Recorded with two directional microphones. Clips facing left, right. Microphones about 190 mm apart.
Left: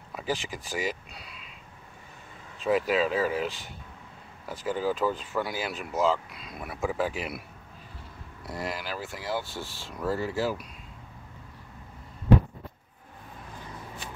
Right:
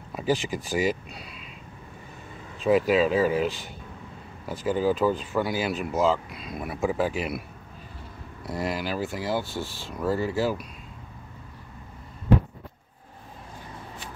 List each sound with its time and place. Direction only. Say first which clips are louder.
0.1 s speech: right 6 dB; 30° right (ahead or behind)
2.6 s speech: right 4 dB; 10° right (ahead or behind)
6.3 s speech: right 5 dB; 20° right (ahead or behind)
8.5 s speech: right 5 dB; 20° right (ahead or behind)
9.9 s speech: right 3 dB; 15° right (ahead or behind)